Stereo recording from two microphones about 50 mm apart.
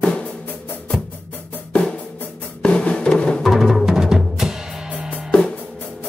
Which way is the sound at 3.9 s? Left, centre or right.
Centre.